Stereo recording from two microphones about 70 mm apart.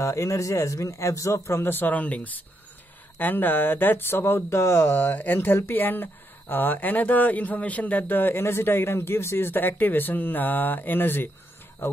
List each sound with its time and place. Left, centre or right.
0.0 s a man's voice: left